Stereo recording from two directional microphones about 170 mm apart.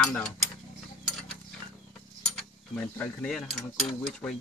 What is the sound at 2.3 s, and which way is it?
Mechanisms, 5° left (ahead or behind).